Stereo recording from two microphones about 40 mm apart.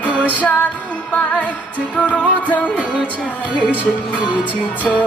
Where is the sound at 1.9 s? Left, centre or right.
Left.